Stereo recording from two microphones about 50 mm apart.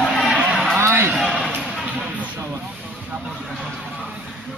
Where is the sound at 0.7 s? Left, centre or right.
Right.